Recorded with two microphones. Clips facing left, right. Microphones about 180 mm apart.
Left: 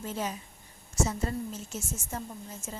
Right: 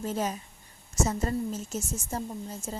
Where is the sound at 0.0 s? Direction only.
40° right (ahead or behind).